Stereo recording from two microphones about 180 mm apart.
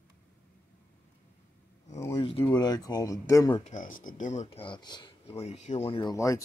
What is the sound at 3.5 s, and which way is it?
Speech, 40° left (ahead or behind).